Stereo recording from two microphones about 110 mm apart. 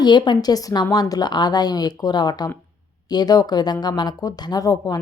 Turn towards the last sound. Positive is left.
turn(degrees=35)  # may be behind; listen again after turning